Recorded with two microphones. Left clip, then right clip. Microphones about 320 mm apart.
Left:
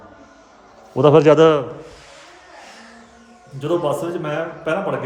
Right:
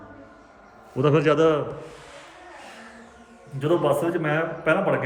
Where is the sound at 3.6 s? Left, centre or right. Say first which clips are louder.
Left 1 dB; centre.